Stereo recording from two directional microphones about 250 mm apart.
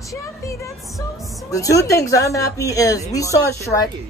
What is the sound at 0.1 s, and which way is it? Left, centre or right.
Speech, centre.